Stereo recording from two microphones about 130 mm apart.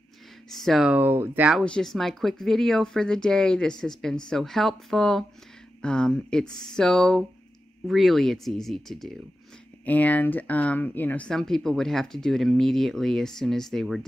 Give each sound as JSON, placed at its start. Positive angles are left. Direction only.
{"t": 0.5, "sound": "speech", "side_deg": 0}
{"t": 0.9, "sound": "speech", "side_deg": -15}
{"t": 1.6, "sound": "speech", "side_deg": 5}
{"t": 9.8, "sound": "speech", "side_deg": 10}